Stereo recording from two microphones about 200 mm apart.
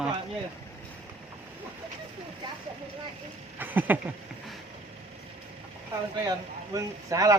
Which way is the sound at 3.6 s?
10° right (ahead or behind).